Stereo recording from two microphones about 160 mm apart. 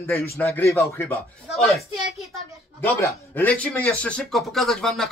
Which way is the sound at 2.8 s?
10° left (ahead or behind).